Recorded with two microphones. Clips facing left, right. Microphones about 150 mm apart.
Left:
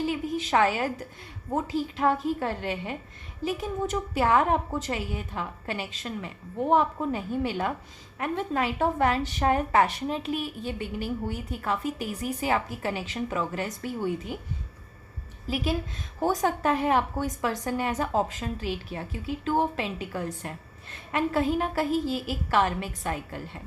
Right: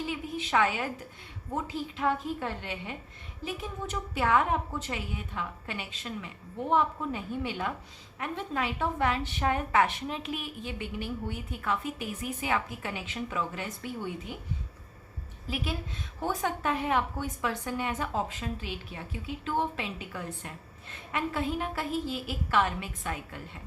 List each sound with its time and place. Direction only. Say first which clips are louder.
0.0 s a woman's voice: left 6 dB; 40° left (ahead or behind)
15.4 s a woman's voice: left 6 dB; 40° left (ahead or behind)